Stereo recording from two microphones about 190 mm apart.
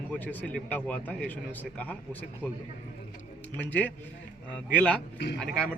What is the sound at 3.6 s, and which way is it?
Speech, 10° left (ahead or behind).